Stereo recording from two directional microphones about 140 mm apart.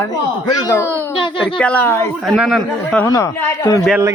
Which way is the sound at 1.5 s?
10° left (ahead or behind).